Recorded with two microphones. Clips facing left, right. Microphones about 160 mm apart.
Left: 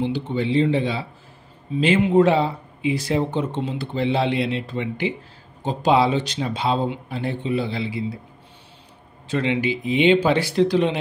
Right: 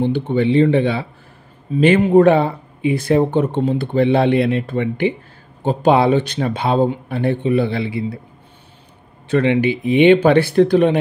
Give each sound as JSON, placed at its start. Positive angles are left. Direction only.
{"t": 0.0, "sound": "speech", "side_deg": -60}
{"t": 9.3, "sound": "speech", "side_deg": -60}